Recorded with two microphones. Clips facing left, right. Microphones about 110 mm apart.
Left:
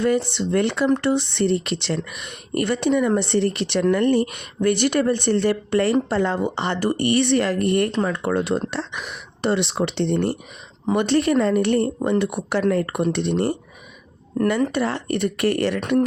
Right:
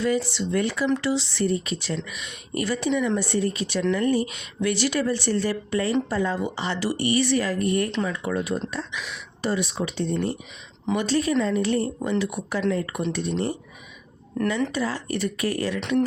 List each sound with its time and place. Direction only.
0.0 s a woman's voice: 60° left (ahead or behind)
7.9 s speech: 45° left (ahead or behind)
8.1 s speech: 60° left (ahead or behind)
9.0 s a woman's voice: 50° left (ahead or behind); by 12.6 s 70° left (ahead or behind)
12.6 s a woman's voice: 55° left (ahead or behind)
14.7 s a woman's voice: 60° left (ahead or behind)